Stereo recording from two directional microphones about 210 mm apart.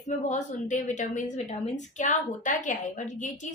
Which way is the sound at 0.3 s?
35° left (ahead or behind).